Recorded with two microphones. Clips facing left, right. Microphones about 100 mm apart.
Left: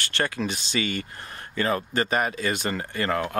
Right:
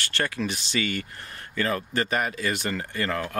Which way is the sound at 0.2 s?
30° left (ahead or behind).